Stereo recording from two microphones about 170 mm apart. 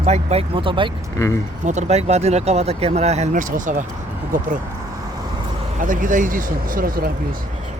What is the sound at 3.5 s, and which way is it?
Speech, 50° right (ahead or behind).